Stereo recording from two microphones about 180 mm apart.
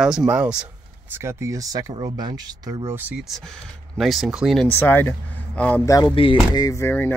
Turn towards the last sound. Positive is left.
turn(degrees=15)  # may be behind; listen again after turning